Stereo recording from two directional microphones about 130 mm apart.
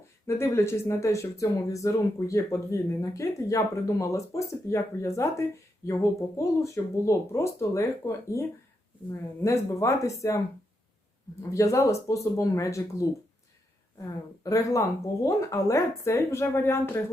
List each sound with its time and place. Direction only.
0.3 s speech: 20° left (ahead or behind)
11.5 s speech: 25° left (ahead or behind)
14.4 s speech: 25° left (ahead or behind)